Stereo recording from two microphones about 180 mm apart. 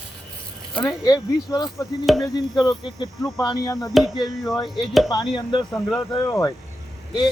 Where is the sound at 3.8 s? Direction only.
Centre (ahead or behind).